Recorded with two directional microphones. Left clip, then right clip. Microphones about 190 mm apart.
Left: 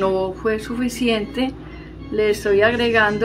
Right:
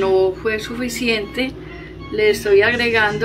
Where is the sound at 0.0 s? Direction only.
50° left (ahead or behind).